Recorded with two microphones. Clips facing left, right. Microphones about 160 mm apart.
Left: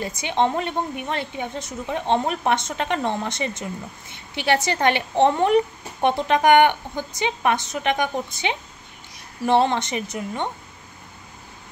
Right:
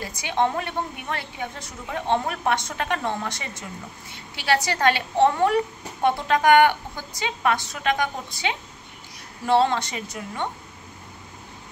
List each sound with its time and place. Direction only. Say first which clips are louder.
0.0 s a woman's voice: left 2 dB; 20° left (ahead or behind)